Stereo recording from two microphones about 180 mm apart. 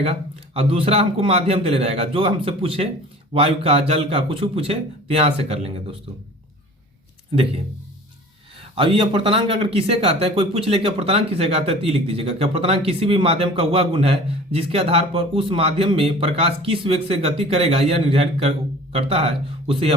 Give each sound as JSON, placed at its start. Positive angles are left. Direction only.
{"t": 0.0, "sound": "speech", "side_deg": -35}
{"t": 8.7, "sound": "speech", "side_deg": -30}